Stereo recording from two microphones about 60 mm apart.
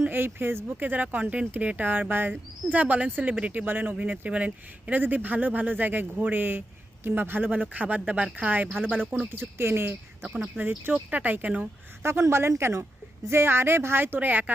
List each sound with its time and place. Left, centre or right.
0.0 s speech: right; by 3.7 s centre
3.7 s speech: right
9.3 s speech: right
10.2 s speech: centre
10.6 s speech: right
12.0 s speech: right